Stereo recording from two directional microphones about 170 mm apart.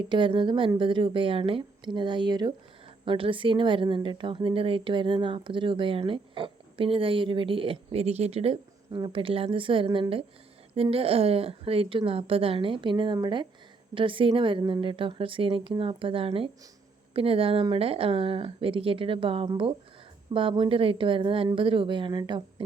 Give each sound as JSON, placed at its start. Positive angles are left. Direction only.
{"t": 0.1, "sound": "a woman's voice", "side_deg": -30}